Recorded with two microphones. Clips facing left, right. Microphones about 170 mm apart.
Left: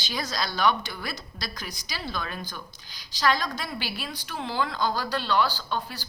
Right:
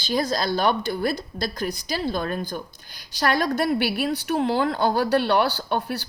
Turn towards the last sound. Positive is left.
turn(degrees=-65)  # may be behind; listen again after turning